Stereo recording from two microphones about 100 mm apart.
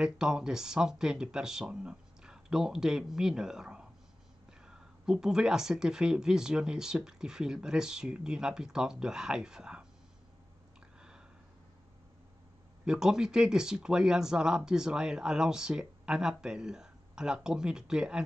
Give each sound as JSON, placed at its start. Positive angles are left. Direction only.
{"t": 0.0, "sound": "speech", "side_deg": -5}
{"t": 11.0, "sound": "a sound", "side_deg": -5}
{"t": 12.8, "sound": "speech", "side_deg": -5}